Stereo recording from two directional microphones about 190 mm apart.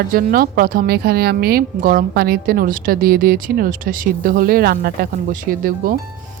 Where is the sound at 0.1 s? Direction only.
50° right (ahead or behind).